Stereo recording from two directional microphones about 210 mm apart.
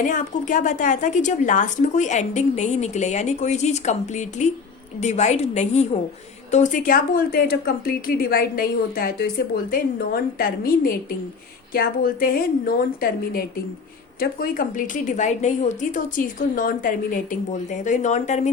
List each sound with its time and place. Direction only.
0.0 s a woman's voice: 40° left (ahead or behind)